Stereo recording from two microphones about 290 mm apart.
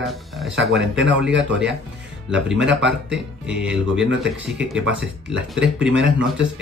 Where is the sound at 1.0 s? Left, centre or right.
Right.